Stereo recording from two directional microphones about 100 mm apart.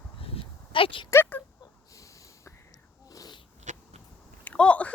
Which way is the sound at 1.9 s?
35° left (ahead or behind).